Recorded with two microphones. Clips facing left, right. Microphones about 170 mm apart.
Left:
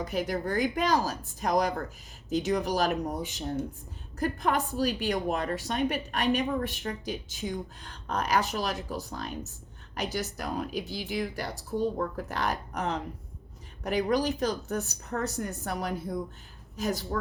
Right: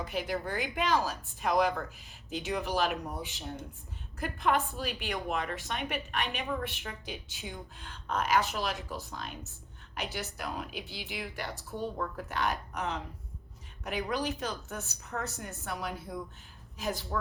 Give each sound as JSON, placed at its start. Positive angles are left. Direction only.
{"t": 0.0, "sound": "a woman's voice", "side_deg": 40}